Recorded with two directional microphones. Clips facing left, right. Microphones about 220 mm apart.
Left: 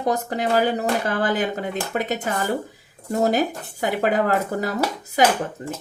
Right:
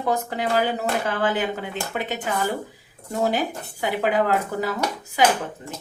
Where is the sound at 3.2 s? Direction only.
45° left (ahead or behind).